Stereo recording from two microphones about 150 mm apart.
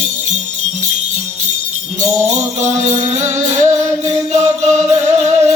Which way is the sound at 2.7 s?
50° right (ahead or behind).